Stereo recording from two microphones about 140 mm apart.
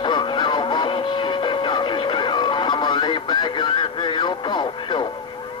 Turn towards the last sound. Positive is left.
turn(degrees=35)  # may be behind; listen again after turning